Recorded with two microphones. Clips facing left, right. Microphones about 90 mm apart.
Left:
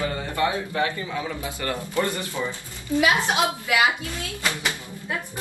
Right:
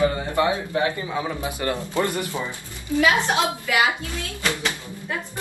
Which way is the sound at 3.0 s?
15° left (ahead or behind).